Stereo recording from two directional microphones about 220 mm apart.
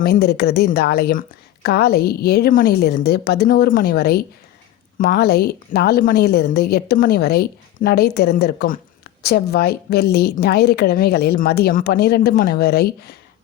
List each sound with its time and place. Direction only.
0.0 s a woman's voice: 45° left (ahead or behind)